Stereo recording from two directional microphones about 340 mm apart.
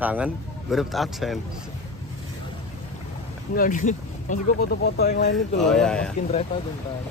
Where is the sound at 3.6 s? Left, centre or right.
Left.